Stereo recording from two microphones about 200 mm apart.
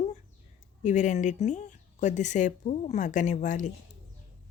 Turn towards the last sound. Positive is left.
turn(degrees=40)  # may be behind; listen again after turning